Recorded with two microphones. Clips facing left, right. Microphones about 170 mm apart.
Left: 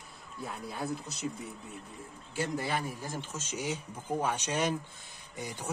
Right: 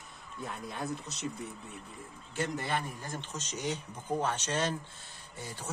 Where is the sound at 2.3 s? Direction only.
5° left (ahead or behind).